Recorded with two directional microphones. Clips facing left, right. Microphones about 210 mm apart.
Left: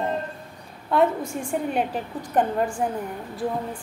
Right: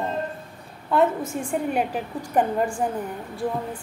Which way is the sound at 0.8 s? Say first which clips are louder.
Even; 5° left (ahead or behind).